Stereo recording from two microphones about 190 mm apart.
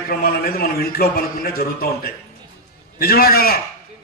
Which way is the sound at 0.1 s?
55° left (ahead or behind).